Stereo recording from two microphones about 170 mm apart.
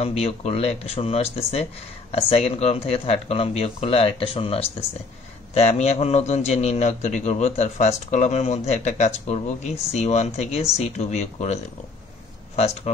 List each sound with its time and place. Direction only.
0.0 s speech: 40° left (ahead or behind)